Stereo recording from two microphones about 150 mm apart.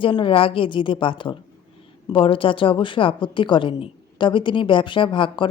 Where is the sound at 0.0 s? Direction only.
35° left (ahead or behind).